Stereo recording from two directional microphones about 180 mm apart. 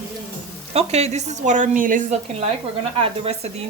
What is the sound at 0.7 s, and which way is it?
Speech, 35° right (ahead or behind).